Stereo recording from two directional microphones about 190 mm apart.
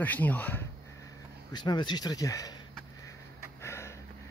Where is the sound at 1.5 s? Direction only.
25° left (ahead or behind).